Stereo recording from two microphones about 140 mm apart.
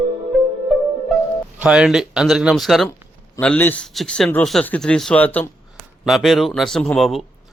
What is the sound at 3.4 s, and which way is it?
A man's voice, 10° left (ahead or behind).